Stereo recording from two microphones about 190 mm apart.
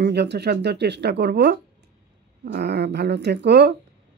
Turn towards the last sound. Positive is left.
turn(degrees=-60)  # may be behind; listen again after turning